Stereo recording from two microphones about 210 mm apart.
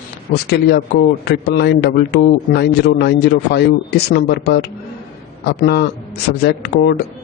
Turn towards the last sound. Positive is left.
turn(degrees=50)  # may be behind; listen again after turning